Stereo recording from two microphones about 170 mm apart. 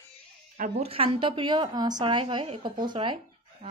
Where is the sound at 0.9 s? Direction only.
30° right (ahead or behind).